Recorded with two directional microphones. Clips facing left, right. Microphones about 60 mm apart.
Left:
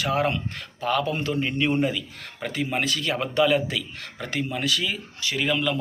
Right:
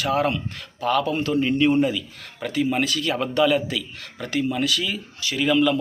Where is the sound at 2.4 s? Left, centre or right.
Left.